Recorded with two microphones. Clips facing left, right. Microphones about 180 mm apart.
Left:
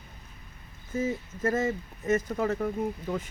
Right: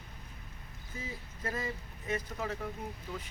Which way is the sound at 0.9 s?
45° left (ahead or behind).